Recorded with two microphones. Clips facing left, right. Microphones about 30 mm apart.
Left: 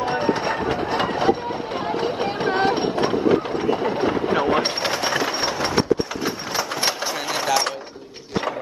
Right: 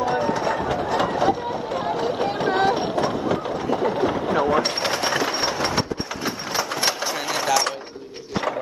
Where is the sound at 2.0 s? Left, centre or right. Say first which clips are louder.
Left 1 dB; left.